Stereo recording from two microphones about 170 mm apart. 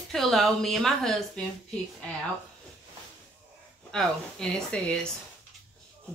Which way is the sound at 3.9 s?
5° left (ahead or behind).